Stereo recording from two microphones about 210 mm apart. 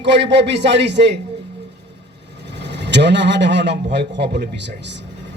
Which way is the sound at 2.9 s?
55° right (ahead or behind).